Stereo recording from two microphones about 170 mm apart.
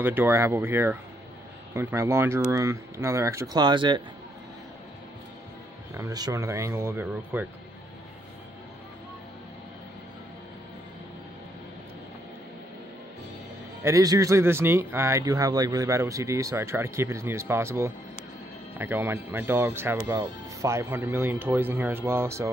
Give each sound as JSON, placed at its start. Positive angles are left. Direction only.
{"t": 0.0, "sound": "speech", "side_deg": -10}
{"t": 5.9, "sound": "speech", "side_deg": -20}
{"t": 13.8, "sound": "speech", "side_deg": -20}